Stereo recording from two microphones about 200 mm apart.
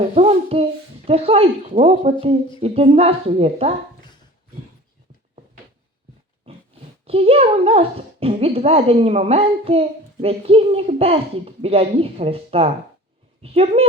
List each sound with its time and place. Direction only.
0.1 s a sound: 30° right (ahead or behind)
1.0 s speech: 30° right (ahead or behind)
7.0 s speech: 30° right (ahead or behind)